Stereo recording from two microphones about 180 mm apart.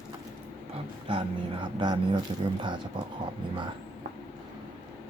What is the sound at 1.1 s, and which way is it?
Speech, 30° right (ahead or behind).